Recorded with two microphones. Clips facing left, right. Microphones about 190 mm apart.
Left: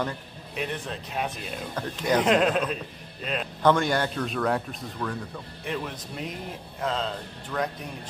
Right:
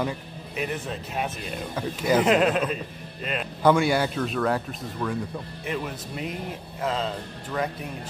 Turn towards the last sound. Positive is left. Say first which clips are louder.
# right 1 dB
turn(degrees=-5)  # may be behind; listen again after turning